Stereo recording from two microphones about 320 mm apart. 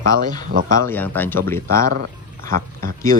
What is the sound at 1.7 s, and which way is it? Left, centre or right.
Speech, right.